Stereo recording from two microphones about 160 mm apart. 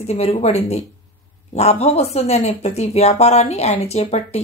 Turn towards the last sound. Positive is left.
turn(degrees=40)  # may be behind; listen again after turning